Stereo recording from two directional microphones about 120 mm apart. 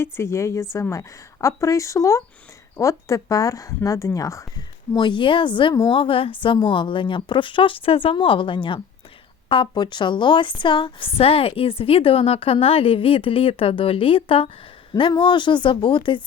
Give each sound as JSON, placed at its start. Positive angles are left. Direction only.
{"t": 0.0, "sound": "a woman's voice", "side_deg": 25}
{"t": 4.9, "sound": "a woman's voice", "side_deg": 40}